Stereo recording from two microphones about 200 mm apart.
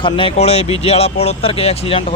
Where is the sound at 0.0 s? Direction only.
25° left (ahead or behind).